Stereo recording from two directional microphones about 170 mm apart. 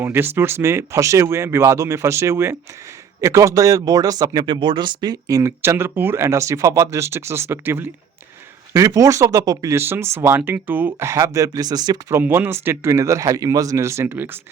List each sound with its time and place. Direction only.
0.0 s speech: 15° right (ahead or behind)